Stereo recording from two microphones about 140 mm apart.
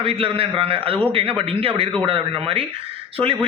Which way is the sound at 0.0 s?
40° right (ahead or behind).